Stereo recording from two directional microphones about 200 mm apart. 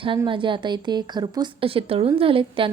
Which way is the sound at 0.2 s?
25° right (ahead or behind).